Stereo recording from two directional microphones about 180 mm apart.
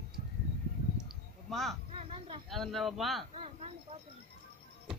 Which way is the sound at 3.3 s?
35° right (ahead or behind).